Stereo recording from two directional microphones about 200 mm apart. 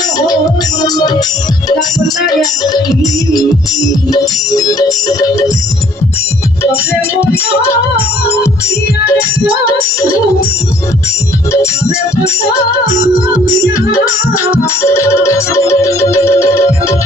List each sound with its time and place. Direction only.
0.8 s music: 20° left (ahead or behind)
2.4 s music: 20° left (ahead or behind)
4.1 s music: 20° left (ahead or behind)
7.2 s music: 15° left (ahead or behind)
13.9 s music: 15° left (ahead or behind)